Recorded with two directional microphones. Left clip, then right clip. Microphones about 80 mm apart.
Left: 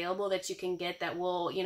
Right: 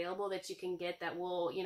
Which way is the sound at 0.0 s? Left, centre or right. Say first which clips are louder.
Left 6 dB; left.